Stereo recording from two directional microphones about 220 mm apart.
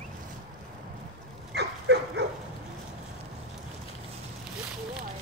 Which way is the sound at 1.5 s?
50° right (ahead or behind).